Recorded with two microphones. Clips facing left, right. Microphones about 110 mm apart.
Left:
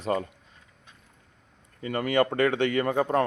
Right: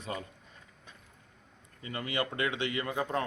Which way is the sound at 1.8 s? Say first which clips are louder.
Left 10 dB; 50° left (ahead or behind).